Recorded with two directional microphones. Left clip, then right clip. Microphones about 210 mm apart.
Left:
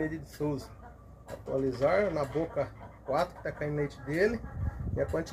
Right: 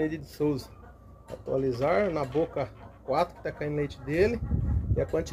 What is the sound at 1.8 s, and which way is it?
Speech, 45° right (ahead or behind).